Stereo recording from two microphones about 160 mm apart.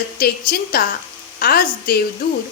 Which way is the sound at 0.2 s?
70° left (ahead or behind).